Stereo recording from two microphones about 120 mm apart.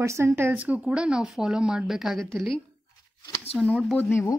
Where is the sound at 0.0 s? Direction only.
20° right (ahead or behind); by 2.5 s centre (ahead or behind).